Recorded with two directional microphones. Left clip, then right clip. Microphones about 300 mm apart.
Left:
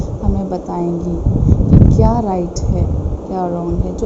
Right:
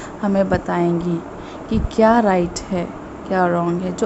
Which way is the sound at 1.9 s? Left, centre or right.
Right.